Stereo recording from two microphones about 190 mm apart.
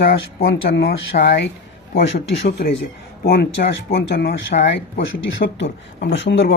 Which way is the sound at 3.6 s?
50° left (ahead or behind).